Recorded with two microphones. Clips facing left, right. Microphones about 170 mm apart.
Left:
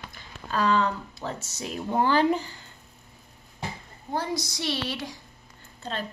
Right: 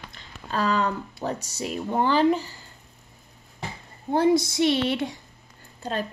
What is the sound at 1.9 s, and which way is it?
Speech, centre (ahead or behind).